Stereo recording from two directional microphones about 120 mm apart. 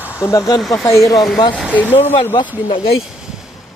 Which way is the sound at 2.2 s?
45° left (ahead or behind).